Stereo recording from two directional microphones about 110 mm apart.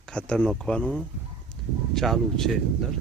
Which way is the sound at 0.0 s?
10° left (ahead or behind).